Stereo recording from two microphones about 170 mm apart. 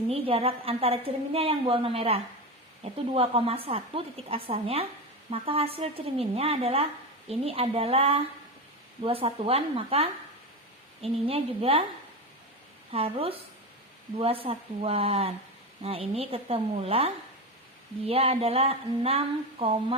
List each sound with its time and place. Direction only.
0.1 s a woman's voice: 35° right (ahead or behind)
12.9 s a woman's voice: 35° right (ahead or behind)